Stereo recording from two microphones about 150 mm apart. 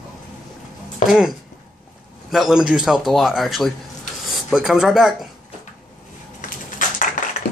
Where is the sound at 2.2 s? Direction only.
5° right (ahead or behind).